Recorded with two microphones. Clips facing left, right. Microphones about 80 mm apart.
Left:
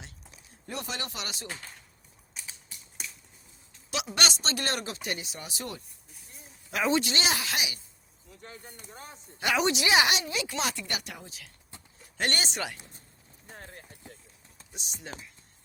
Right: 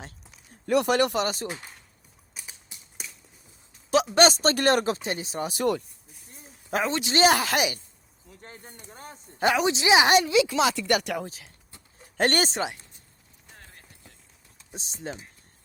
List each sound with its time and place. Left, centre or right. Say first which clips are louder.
0.7 s speech: right 15 dB; right
1.1 s speech: right 13 dB; right
2.3 s typing: even; centre
4.1 s speech: right 9 dB; right
5.0 s speech: right 7 dB; right
6.3 s a sound: right 6 dB; right
7.1 s speech: right 10 dB; right
9.6 s speech: right 3 dB; right
10.2 s speech: right 10 dB; right
12.1 s speech: right 7 dB; right
12.5 s speech: right 6 dB; right
14.7 s speech: right 8 dB; right